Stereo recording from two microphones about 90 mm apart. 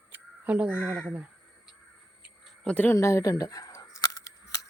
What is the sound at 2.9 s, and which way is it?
Speech, 35° left (ahead or behind).